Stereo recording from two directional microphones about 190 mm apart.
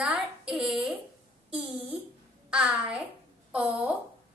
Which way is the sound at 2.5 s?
5° right (ahead or behind).